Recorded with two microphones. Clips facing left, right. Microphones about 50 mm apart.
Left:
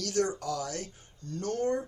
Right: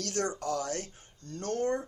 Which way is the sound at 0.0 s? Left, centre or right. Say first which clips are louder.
Left 2 dB; right.